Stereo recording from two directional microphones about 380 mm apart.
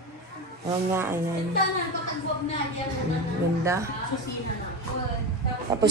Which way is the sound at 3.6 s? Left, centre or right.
Centre.